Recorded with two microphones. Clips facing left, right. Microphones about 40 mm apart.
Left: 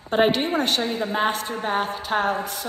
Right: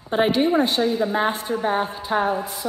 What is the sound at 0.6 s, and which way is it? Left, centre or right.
Speech, left.